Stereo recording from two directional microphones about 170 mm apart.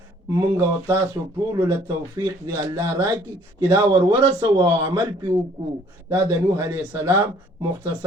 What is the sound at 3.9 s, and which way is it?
Speech, 30° right (ahead or behind).